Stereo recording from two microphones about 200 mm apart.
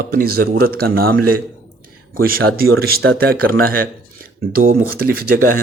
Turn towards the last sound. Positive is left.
turn(degrees=-45)  # may be behind; listen again after turning